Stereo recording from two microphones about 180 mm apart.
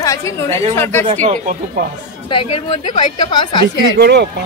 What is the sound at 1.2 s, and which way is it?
Speech, 45° right (ahead or behind).